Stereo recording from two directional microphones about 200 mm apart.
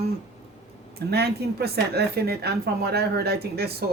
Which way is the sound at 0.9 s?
55° right (ahead or behind).